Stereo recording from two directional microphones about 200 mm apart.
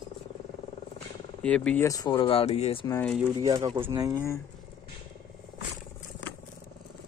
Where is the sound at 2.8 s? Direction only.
15° left (ahead or behind).